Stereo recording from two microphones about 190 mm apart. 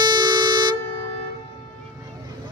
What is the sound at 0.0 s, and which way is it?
Vehicle, 20° right (ahead or behind).